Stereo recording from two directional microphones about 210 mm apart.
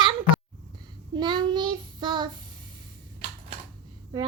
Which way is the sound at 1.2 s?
20° right (ahead or behind).